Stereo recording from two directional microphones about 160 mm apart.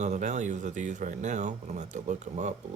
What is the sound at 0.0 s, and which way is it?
Speech, 50° right (ahead or behind).